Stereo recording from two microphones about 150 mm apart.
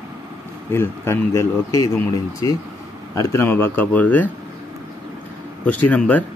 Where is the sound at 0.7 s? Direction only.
15° left (ahead or behind).